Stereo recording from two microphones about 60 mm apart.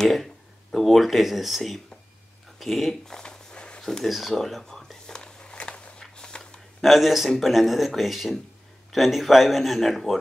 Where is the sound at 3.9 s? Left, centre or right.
Centre.